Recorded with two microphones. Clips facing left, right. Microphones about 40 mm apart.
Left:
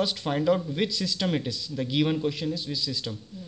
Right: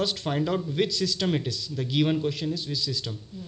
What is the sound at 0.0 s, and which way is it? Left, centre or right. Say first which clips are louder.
Speech: left 1 dB; centre.